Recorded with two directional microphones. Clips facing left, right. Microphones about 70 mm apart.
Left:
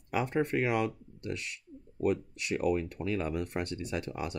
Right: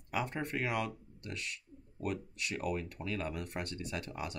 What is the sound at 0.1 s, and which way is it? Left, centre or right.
Speech, left.